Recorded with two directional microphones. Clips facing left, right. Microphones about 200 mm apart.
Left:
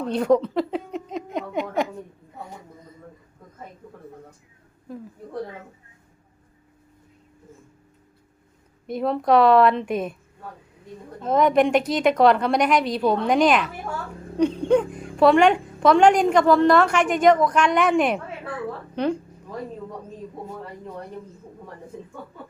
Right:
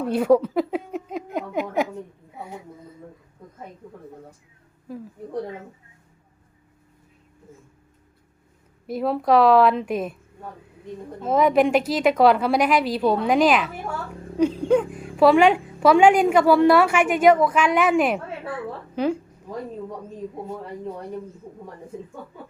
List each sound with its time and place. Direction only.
0.0 s a sound: 5° right (ahead or behind)
2.3 s speech: 10° right (ahead or behind)
4.9 s a woman's voice: 5° right (ahead or behind)
8.9 s a woman's voice: 5° right (ahead or behind)
11.2 s a woman's voice: 5° right (ahead or behind)